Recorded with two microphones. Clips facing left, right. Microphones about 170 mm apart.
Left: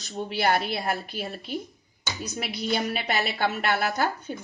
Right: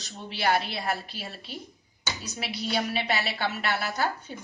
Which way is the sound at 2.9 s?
50° left (ahead or behind).